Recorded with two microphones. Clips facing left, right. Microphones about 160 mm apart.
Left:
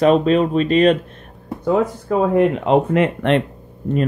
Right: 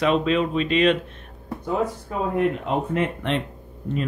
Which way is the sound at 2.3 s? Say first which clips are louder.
Left 7 dB; 90° left.